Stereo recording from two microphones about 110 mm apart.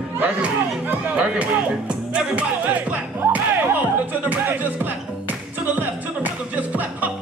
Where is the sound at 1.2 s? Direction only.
10° right (ahead or behind).